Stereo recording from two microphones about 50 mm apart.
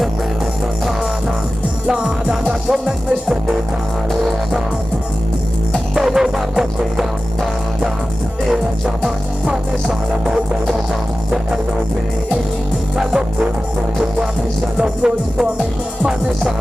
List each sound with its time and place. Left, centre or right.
1.9 s music: centre
5.9 s music: centre
9.5 s music: centre
12.9 s music: centre
14.8 s music: centre